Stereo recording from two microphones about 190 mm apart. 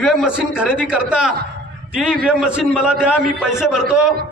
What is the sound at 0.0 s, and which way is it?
A man's voice, centre (ahead or behind).